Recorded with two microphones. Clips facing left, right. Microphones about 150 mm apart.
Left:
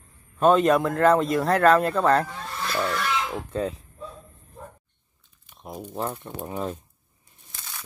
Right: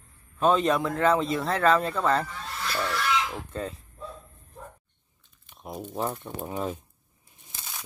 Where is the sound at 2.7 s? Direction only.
20° left (ahead or behind).